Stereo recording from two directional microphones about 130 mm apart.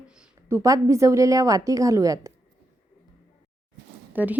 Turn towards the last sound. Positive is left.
turn(degrees=-10)  # may be behind; listen again after turning